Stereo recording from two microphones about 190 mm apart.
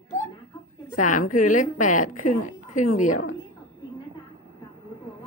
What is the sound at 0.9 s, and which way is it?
A woman's voice, 45° left (ahead or behind).